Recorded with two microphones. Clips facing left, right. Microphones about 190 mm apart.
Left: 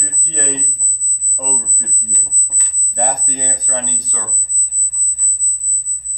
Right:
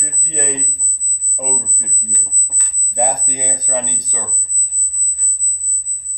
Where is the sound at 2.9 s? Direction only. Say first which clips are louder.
Right 2 dB; 10° right (ahead or behind).